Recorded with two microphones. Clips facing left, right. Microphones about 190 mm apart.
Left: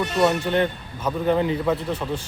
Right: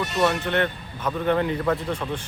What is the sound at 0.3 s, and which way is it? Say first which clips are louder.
Speech: left 2 dB; 10° left (ahead or behind).